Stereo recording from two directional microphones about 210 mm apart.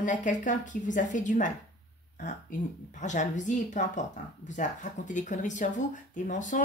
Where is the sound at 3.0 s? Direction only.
35° left (ahead or behind).